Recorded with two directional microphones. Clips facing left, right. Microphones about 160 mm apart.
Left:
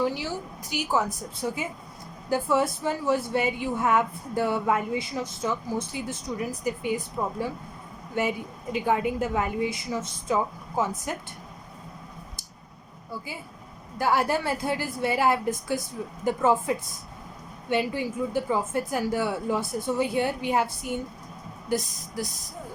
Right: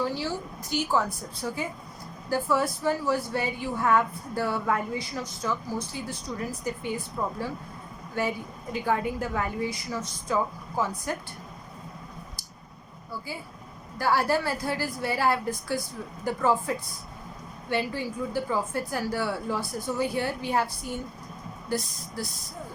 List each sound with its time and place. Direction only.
0.0 s a woman's voice: 15° left (ahead or behind)
14.0 s a woman's voice: 15° left (ahead or behind)
17.7 s a woman's voice: 20° left (ahead or behind)